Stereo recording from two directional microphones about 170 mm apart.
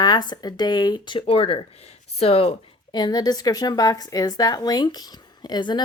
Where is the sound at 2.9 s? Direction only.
25° left (ahead or behind).